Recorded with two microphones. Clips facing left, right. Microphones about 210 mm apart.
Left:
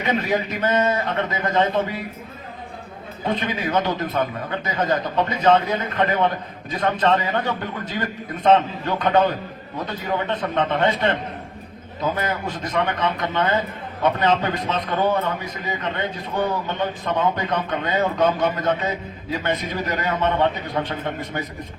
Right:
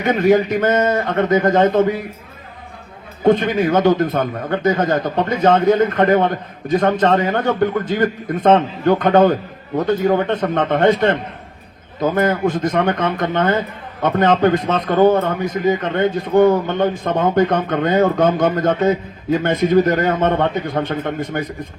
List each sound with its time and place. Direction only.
0.0 s a man's voice: 45° right (ahead or behind)
3.2 s a man's voice: 45° right (ahead or behind)